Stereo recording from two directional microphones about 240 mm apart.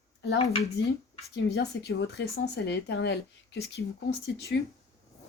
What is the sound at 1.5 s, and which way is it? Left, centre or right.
Speech, left.